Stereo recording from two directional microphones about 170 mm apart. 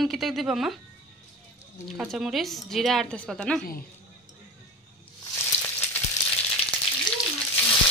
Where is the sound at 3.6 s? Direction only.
60° left (ahead or behind).